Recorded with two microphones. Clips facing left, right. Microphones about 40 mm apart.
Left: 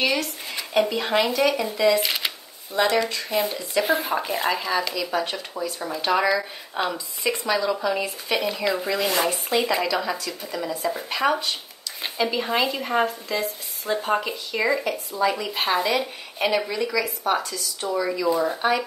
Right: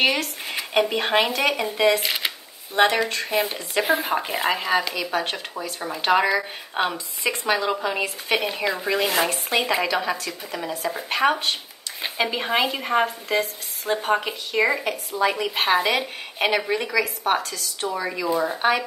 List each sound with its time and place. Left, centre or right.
0.0 s speech: right
2.0 s speech: centre
3.1 s speech: right
3.8 s a woman's voice: right
9.3 s a woman's voice: right
17.8 s a woman's voice: right